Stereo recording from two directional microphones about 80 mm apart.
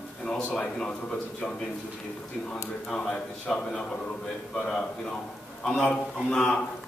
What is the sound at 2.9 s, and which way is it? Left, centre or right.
Speech, centre.